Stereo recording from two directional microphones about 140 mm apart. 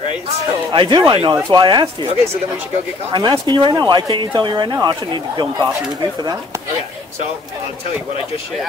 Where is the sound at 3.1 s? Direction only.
30° right (ahead or behind).